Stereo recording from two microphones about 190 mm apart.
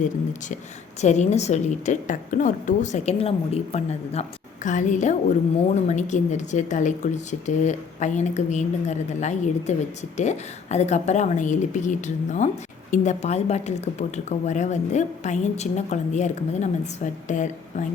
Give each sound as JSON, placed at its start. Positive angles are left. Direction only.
{"t": 1.0, "sound": "a woman's voice", "side_deg": 40}